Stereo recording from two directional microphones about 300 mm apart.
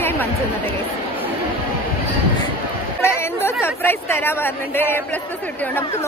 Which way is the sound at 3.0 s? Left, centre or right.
Centre.